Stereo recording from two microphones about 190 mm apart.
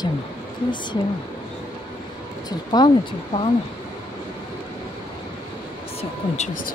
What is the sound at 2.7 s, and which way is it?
Speech, 25° left (ahead or behind).